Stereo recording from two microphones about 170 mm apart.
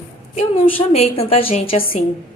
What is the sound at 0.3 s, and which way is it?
A woman's voice, 35° left (ahead or behind).